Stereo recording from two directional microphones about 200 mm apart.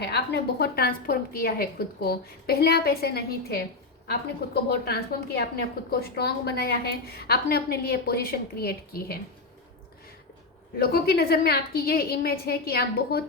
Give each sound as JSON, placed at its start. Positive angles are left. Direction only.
{"t": 0.0, "sound": "a woman's voice", "side_deg": 55}
{"t": 10.8, "sound": "a woman's voice", "side_deg": 50}